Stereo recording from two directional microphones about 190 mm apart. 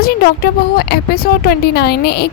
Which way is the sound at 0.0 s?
50° left (ahead or behind).